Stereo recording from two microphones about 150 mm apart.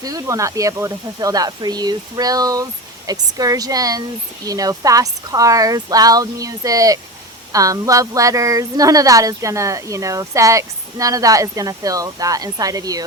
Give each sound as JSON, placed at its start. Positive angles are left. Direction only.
{"t": 0.0, "sound": "a woman's voice", "side_deg": -25}